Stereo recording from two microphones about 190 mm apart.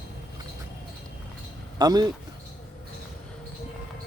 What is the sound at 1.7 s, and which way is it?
Speech, 20° right (ahead or behind).